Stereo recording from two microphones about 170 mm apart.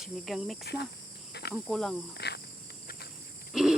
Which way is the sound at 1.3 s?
75° left (ahead or behind).